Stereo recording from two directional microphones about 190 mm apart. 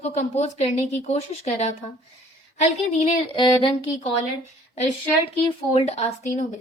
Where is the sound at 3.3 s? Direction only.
25° left (ahead or behind).